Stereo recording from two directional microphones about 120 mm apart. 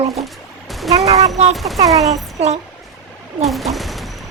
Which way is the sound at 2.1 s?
70° right (ahead or behind).